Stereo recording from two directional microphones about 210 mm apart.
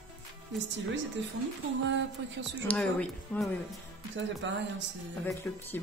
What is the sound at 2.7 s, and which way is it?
Speech, 5° left (ahead or behind).